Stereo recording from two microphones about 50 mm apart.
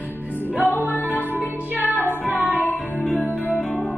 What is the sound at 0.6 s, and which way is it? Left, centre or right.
Music, left.